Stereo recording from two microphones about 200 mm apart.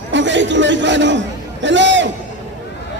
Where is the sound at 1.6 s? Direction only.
65° right (ahead or behind).